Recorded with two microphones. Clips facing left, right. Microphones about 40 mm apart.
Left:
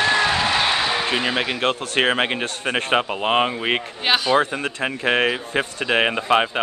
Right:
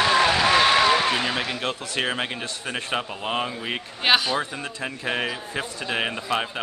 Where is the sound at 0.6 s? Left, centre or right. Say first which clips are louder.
Right 2 dB; centre.